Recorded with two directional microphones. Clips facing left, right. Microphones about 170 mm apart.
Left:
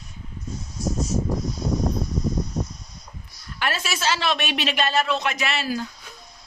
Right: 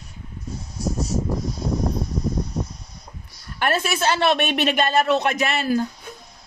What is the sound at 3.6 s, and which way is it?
Speech, 55° right (ahead or behind).